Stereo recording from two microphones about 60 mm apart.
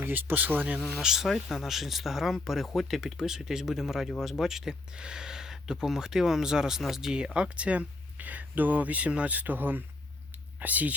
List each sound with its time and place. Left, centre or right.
0.0 s speech: right
0.8 s speech: centre; by 10.9 s right